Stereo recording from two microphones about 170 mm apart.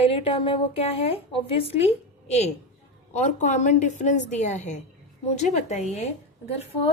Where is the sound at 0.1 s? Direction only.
35° left (ahead or behind).